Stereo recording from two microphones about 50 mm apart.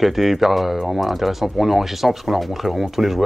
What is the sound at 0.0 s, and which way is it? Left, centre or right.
Speech, centre.